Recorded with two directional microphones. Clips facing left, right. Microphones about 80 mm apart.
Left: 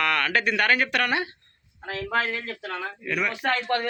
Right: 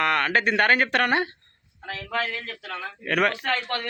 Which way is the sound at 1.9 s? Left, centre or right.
Left.